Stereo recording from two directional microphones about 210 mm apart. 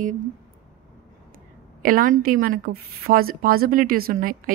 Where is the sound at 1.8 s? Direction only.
40° right (ahead or behind).